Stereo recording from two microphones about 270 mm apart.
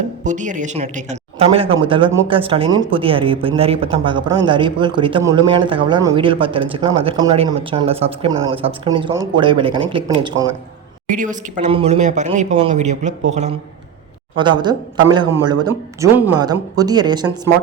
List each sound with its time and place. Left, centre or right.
0.3 s a man's voice: right
11.1 s a man's voice: right